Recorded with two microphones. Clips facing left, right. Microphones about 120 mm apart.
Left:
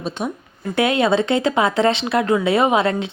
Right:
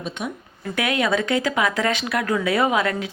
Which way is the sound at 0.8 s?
30° left (ahead or behind).